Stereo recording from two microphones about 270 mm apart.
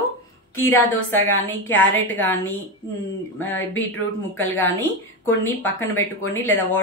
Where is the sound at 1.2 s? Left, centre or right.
Centre.